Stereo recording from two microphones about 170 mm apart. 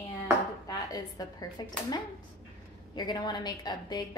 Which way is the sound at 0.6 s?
20° left (ahead or behind).